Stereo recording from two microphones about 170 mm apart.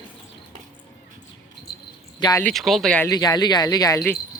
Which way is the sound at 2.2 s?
20° left (ahead or behind).